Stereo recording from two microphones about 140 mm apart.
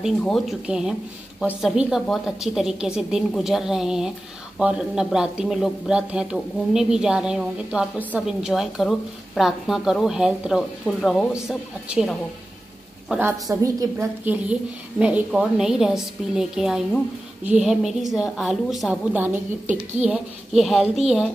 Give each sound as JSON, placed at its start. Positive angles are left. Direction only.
{"t": 0.0, "sound": "a woman's voice", "side_deg": 0}
{"t": 13.5, "sound": "a woman's voice", "side_deg": -25}
{"t": 14.2, "sound": "speech", "side_deg": -10}
{"t": 19.1, "sound": "a woman's voice", "side_deg": -15}
{"t": 20.1, "sound": "speech", "side_deg": 0}